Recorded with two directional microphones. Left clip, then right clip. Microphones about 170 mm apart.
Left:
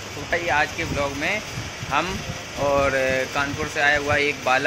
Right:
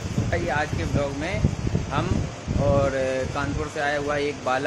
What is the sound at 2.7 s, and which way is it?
Speech, centre (ahead or behind).